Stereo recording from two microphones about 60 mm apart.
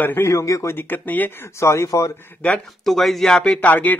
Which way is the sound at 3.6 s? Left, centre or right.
Left.